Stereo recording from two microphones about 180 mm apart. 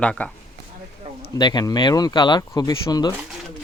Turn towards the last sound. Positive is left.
turn(degrees=20)  # may be behind; listen again after turning